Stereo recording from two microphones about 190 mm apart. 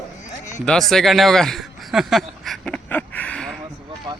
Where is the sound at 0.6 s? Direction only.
5° left (ahead or behind).